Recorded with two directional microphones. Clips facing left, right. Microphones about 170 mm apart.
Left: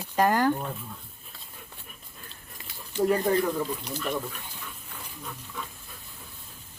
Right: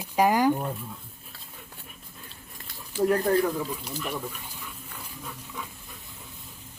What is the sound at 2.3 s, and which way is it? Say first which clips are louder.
Speech: even; centre (ahead or behind).